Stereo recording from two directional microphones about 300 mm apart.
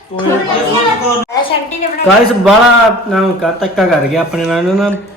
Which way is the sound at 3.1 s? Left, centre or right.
Centre.